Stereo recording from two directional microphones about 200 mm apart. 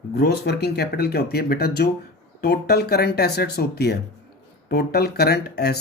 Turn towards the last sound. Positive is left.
turn(degrees=55)  # may be behind; listen again after turning